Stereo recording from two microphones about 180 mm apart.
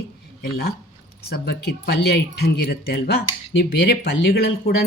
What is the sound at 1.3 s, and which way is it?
Speech, 60° left (ahead or behind).